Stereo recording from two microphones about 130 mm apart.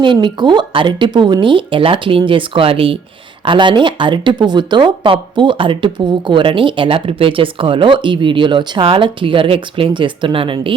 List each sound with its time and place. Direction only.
0.0 s speech: 35° right (ahead or behind)